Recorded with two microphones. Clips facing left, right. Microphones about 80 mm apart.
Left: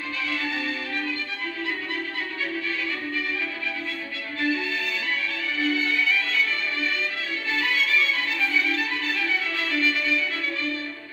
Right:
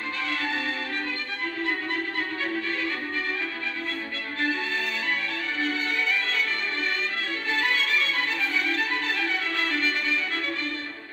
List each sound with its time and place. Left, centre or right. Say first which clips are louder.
0.3 s music: even; right
4.4 s music: left 2 dB; right
7.5 s music: left 1 dB; right